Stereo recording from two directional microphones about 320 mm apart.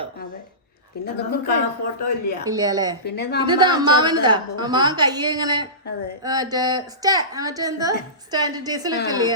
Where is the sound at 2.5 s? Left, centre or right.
Centre.